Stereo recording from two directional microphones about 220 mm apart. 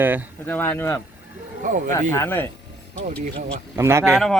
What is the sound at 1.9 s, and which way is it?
Speech, 10° left (ahead or behind).